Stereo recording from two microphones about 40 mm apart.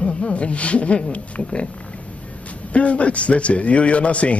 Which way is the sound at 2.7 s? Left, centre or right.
Left.